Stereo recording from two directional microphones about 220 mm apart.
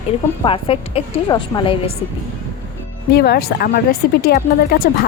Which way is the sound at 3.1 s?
45° left (ahead or behind).